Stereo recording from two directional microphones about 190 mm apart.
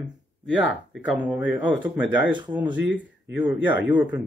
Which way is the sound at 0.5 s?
5° right (ahead or behind).